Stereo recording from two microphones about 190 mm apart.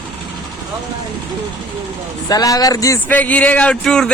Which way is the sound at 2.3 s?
20° left (ahead or behind).